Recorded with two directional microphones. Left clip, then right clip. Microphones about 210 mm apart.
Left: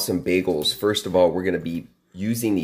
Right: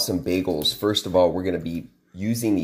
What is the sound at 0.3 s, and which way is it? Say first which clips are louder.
Speech: left 3 dB; 5° left (ahead or behind).